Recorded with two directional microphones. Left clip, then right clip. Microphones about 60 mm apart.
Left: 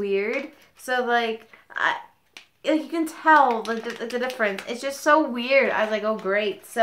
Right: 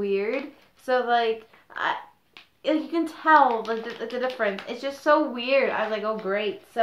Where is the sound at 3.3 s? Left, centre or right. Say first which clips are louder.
Left 2 dB; centre.